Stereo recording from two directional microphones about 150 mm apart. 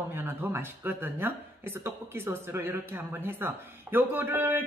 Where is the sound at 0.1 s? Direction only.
15° right (ahead or behind).